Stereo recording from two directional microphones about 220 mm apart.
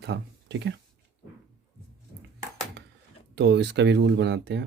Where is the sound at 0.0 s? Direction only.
50° right (ahead or behind).